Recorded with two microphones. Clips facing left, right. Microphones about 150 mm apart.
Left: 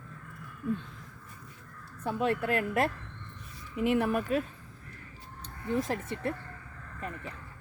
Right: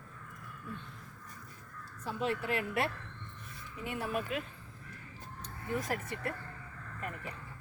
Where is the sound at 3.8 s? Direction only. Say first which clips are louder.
Left 9 dB; 70° left (ahead or behind).